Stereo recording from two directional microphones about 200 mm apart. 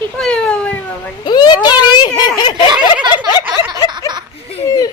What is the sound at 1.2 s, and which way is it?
Speech, 20° left (ahead or behind).